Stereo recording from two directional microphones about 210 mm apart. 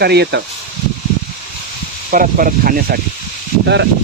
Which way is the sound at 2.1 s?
40° right (ahead or behind).